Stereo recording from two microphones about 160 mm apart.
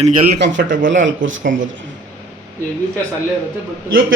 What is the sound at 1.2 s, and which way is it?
Speech, 55° right (ahead or behind).